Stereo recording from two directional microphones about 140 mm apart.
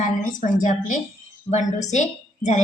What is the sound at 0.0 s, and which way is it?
Speech, 70° left (ahead or behind).